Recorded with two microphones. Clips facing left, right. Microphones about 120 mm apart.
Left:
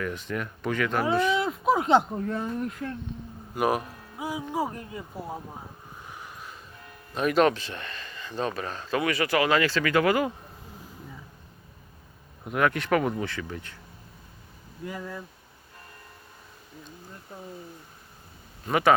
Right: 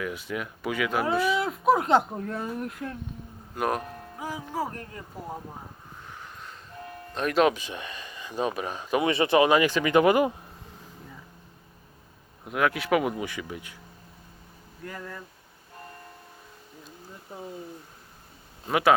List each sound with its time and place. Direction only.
0.0 s speech: 5° right (ahead or behind); by 5.4 s 10° left (ahead or behind)
6.1 s a sound: 10° left (ahead or behind)
7.1 s speech: 5° left (ahead or behind)
7.5 s speech: 15° right (ahead or behind)
12.5 s speech: centre (ahead or behind)
14.8 s speech: 10° left (ahead or behind)
17.3 s speech: 10° right (ahead or behind)
18.7 s speech: centre (ahead or behind)